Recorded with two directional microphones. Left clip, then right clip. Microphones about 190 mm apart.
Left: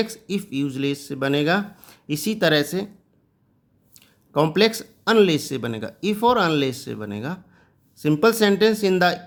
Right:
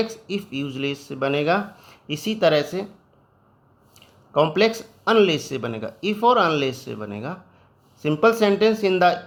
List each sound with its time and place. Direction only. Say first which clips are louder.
0.0 s speech: even; 35° left (ahead or behind)
4.0 s a sound: right 1 dB; 40° left (ahead or behind)
5.1 s speech: even; 35° left (ahead or behind)